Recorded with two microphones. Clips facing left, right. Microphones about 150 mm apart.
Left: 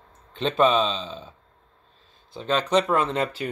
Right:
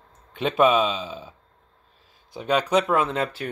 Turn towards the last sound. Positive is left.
turn(degrees=0)  # may be behind; listen again after turning